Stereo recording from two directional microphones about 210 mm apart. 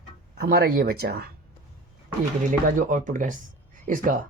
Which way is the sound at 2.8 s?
35° right (ahead or behind).